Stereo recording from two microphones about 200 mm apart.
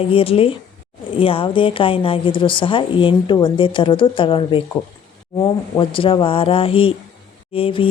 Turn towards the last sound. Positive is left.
turn(degrees=25)  # may be behind; listen again after turning